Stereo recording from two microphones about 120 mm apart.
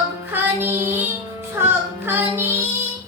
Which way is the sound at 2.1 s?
20° right (ahead or behind).